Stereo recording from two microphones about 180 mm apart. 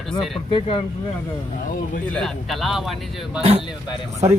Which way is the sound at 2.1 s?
Centre (ahead or behind).